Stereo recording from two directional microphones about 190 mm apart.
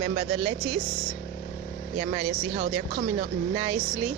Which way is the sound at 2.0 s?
25° right (ahead or behind).